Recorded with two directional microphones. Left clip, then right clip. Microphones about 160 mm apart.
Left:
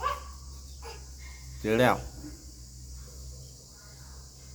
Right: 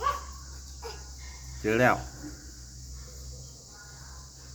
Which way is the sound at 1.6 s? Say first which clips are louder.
Right 1 dB; 15° left (ahead or behind).